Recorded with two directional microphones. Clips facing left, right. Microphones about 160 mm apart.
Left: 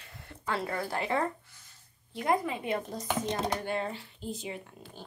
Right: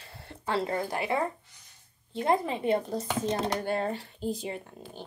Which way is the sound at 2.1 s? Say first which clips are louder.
Right 2 dB; 30° right (ahead or behind).